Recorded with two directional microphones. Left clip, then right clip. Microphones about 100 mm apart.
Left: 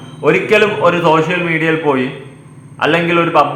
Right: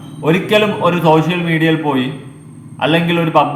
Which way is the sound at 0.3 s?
20° right (ahead or behind).